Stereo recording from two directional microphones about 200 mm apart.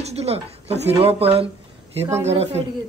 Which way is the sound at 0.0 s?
30° right (ahead or behind).